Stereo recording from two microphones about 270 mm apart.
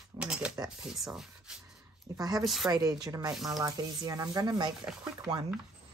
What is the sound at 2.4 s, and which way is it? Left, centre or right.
Speech, centre.